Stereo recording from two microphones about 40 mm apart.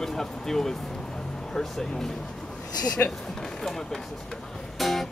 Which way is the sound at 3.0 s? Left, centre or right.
Left.